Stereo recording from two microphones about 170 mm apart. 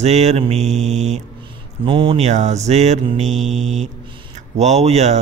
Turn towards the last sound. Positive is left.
turn(degrees=-40)  # may be behind; listen again after turning